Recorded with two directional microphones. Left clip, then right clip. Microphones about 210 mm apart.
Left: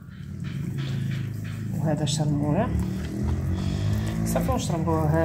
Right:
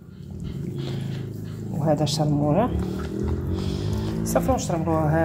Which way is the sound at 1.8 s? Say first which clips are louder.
Right 6 dB; 20° right (ahead or behind).